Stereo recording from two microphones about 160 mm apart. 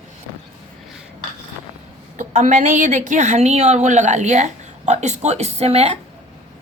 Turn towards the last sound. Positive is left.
turn(degrees=-40)  # may be behind; listen again after turning